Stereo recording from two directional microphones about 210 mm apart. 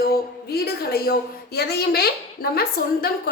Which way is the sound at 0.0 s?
45° left (ahead or behind).